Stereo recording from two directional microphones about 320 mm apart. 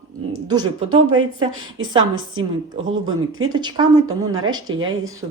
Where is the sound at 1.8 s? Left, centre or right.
Centre.